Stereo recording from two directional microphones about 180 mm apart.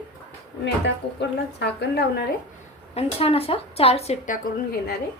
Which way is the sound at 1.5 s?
70° left (ahead or behind).